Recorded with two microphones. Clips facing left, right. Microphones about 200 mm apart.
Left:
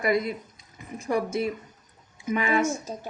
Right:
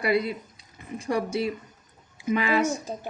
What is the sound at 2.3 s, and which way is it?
Speech, 30° right (ahead or behind).